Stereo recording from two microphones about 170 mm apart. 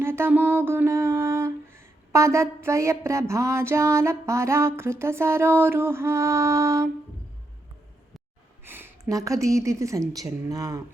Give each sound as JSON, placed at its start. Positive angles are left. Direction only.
{"t": 0.0, "sound": "music", "side_deg": -15}
{"t": 8.6, "sound": "speech", "side_deg": -10}